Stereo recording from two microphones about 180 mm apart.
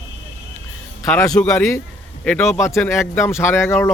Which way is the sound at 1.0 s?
10° left (ahead or behind).